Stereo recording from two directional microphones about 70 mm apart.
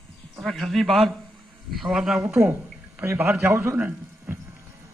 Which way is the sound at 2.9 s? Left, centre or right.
Right.